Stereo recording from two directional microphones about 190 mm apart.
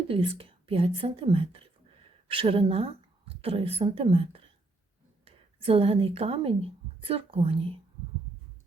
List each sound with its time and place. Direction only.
0.1 s a woman's voice: 30° right (ahead or behind)